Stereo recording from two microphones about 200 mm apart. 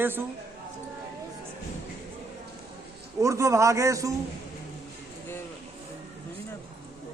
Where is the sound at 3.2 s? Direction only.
15° right (ahead or behind).